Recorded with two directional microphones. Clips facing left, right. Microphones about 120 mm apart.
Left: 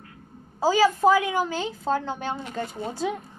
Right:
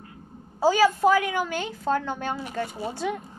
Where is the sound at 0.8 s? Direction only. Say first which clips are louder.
Left 1 dB; 15° left (ahead or behind).